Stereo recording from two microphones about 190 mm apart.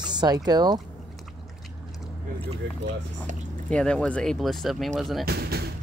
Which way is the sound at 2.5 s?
40° right (ahead or behind).